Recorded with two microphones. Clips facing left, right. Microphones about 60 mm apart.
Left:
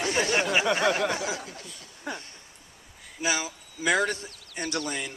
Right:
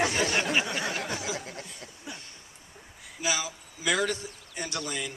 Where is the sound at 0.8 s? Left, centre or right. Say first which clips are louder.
Left 8 dB; left.